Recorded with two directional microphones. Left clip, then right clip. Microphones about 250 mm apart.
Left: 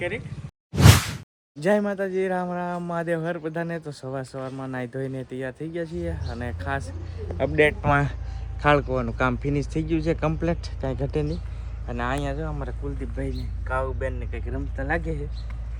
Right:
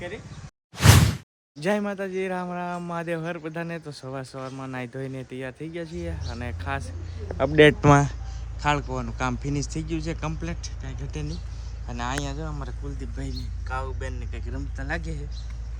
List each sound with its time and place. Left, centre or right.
1.5 s speech: centre
7.3 s speech: right
7.6 s speech: right
8.6 s speech: centre
11.9 s speech: centre